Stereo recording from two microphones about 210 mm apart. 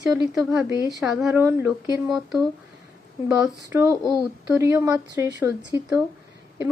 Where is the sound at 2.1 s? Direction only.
Centre (ahead or behind).